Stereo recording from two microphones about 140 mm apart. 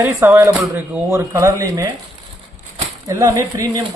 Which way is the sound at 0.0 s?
15° right (ahead or behind).